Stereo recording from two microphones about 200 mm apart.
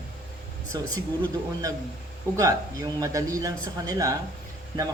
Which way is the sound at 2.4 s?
15° right (ahead or behind).